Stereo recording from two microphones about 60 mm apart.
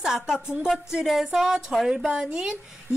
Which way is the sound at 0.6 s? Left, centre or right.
Centre.